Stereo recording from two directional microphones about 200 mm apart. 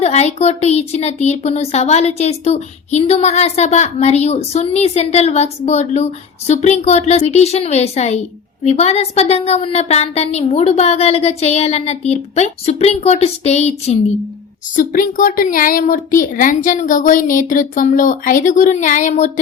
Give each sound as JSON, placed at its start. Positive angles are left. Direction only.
{"t": 0.0, "sound": "speech", "side_deg": 30}